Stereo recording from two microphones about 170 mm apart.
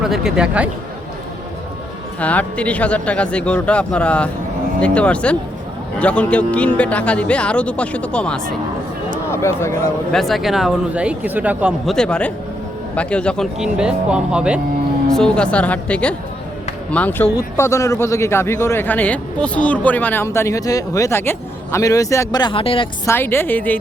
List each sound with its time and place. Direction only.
0.0 s speech: 5° right (ahead or behind)
2.2 s speech: 10° left (ahead or behind)
10.1 s speech: centre (ahead or behind)
11.9 s speech: 5° left (ahead or behind)
15.1 s speech: 5° left (ahead or behind); by 22.9 s 30° left (ahead or behind)
23.0 s speech: 15° left (ahead or behind)